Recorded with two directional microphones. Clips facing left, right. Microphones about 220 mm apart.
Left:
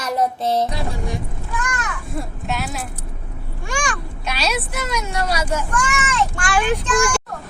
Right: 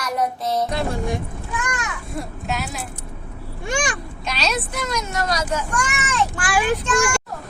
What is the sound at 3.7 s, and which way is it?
Speech, 20° right (ahead or behind).